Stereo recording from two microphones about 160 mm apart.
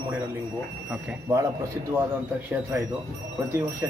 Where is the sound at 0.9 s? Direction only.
15° right (ahead or behind).